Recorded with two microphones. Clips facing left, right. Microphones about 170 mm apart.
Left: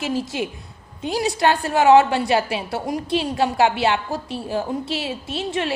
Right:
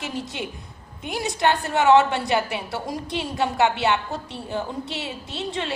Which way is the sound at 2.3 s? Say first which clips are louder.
Left 3 dB; 25° left (ahead or behind).